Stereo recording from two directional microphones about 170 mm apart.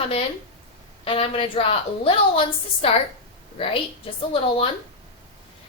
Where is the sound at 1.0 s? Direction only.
35° left (ahead or behind).